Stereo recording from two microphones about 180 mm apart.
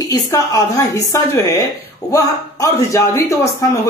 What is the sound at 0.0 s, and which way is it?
Speech, 20° left (ahead or behind).